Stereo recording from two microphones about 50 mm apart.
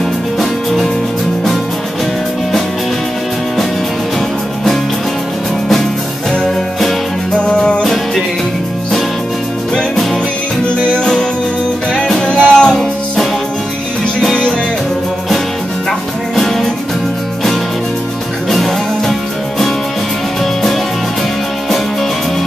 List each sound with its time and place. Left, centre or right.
7.3 s music: centre
10.6 s music: centre
16.3 s music: centre
18.5 s music: centre